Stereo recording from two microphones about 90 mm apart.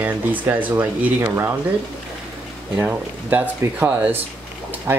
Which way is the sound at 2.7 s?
20° right (ahead or behind).